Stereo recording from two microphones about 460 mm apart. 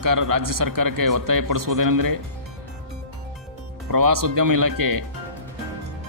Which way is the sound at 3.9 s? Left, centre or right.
Right.